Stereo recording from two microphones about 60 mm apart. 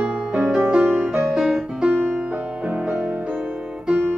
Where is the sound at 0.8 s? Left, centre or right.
Right.